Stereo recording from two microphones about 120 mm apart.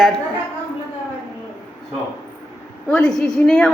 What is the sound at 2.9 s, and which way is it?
Speech, 5° left (ahead or behind).